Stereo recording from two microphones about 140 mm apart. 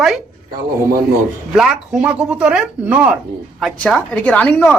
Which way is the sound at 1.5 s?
5° right (ahead or behind).